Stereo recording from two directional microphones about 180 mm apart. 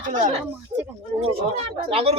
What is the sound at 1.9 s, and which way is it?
Speech, 35° right (ahead or behind).